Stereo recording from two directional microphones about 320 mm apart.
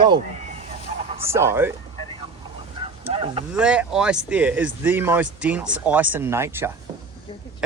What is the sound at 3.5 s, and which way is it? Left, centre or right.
Speech, centre.